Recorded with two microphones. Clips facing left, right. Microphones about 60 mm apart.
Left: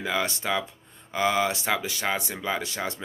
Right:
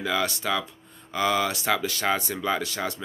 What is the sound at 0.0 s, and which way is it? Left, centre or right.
Speech, left.